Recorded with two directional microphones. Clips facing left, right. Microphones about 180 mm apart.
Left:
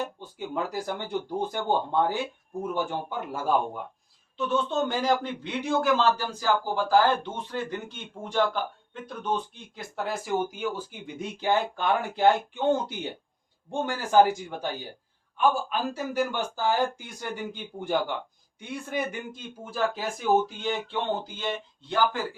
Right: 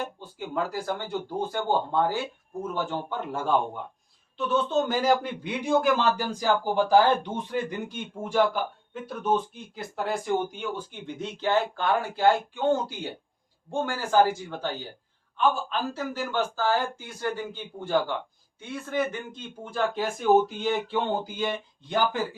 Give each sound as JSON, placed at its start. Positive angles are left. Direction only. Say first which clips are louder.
{"t": 0.3, "sound": "a man's voice", "louder": "right 1 dB", "side_deg": 20}